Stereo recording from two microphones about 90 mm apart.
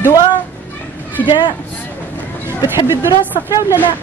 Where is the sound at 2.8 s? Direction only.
30° right (ahead or behind).